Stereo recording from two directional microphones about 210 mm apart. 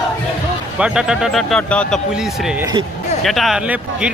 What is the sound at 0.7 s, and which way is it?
Speech, 5° right (ahead or behind).